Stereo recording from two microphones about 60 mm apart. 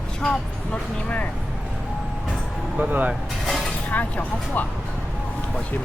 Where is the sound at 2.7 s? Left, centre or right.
Right.